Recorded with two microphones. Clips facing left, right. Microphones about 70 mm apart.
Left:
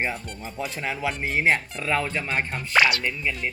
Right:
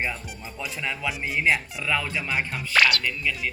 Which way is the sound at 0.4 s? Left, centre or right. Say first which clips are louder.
Left 2 dB; left.